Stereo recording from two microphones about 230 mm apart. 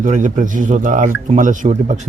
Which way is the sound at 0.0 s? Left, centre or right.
Right.